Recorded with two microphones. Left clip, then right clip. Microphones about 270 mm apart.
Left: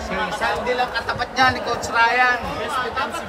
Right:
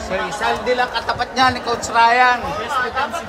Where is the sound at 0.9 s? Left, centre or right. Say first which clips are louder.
Right 3 dB; centre.